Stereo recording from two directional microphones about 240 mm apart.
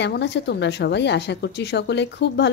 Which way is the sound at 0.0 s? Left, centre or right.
Left.